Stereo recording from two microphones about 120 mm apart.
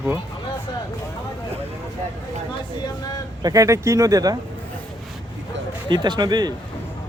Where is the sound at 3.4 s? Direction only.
30° right (ahead or behind).